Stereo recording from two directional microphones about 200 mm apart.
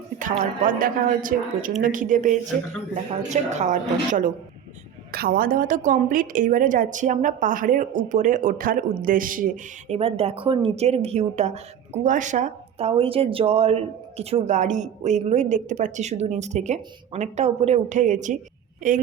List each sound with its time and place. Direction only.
0.6 s speech: 45° right (ahead or behind)
9.9 s speech: 30° right (ahead or behind)